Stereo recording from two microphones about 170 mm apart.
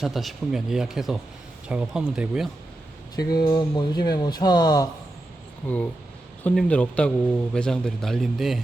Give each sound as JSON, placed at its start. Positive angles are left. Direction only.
{"t": 0.0, "sound": "speech", "side_deg": 0}
{"t": 3.2, "sound": "speech", "side_deg": 25}
{"t": 5.6, "sound": "speech", "side_deg": 5}